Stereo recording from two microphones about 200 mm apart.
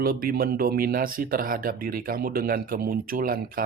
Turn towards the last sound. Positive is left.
turn(degrees=-45)  # may be behind; listen again after turning